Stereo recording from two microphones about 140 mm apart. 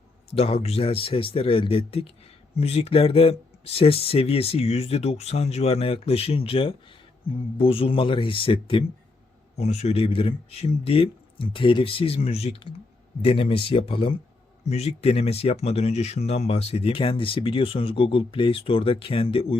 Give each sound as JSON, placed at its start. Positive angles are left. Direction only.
{"t": 0.3, "sound": "speech", "side_deg": 45}
{"t": 9.6, "sound": "speech", "side_deg": 50}
{"t": 14.6, "sound": "speech", "side_deg": 50}